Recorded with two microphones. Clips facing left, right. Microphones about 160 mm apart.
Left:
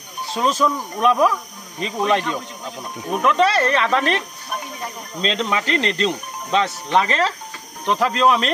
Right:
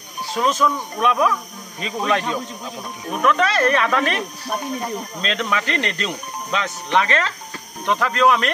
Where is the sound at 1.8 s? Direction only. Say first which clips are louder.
Left 2 dB; 30° left (ahead or behind).